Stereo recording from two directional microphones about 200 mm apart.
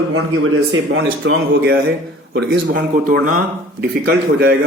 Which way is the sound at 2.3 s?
50° right (ahead or behind).